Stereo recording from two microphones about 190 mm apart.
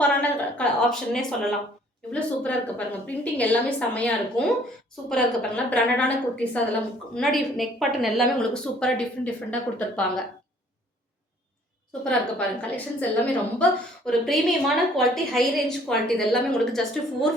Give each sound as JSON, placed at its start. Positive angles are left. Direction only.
{"t": 0.0, "sound": "a sound", "side_deg": 5}
{"t": 2.1, "sound": "a woman's voice", "side_deg": 5}
{"t": 12.0, "sound": "a woman's voice", "side_deg": 5}